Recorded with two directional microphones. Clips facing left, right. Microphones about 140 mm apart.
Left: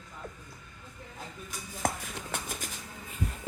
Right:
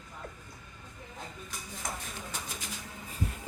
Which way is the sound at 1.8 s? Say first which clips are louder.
Left 8 dB; 65° left (ahead or behind).